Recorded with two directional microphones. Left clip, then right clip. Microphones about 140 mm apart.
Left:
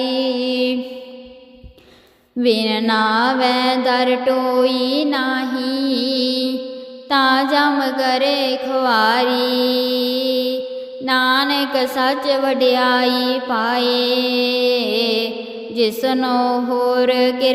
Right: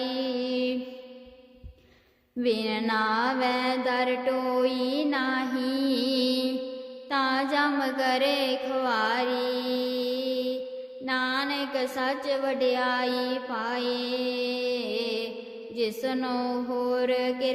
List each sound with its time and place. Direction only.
0.0 s music: 50° left (ahead or behind)
2.4 s mantra: 50° left (ahead or behind)
7.1 s a sound: 55° left (ahead or behind)
11.0 s music: 60° left (ahead or behind)
15.7 s mantra: 70° left (ahead or behind)